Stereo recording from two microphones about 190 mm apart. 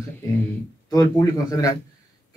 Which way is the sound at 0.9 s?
20° left (ahead or behind).